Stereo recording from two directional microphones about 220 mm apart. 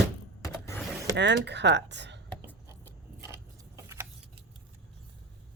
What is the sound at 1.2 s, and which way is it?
Speech, 50° right (ahead or behind).